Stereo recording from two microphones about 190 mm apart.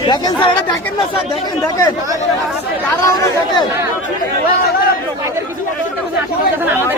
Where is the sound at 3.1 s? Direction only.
20° left (ahead or behind).